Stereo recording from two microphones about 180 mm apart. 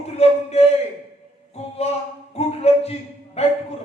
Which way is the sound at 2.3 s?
35° left (ahead or behind).